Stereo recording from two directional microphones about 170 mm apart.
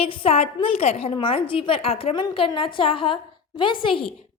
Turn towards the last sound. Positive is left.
turn(degrees=30)  # may be behind; listen again after turning